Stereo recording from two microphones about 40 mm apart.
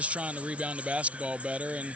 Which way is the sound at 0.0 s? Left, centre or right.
Right.